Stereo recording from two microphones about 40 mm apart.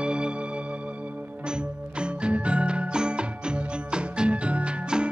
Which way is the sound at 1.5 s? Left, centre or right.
Right.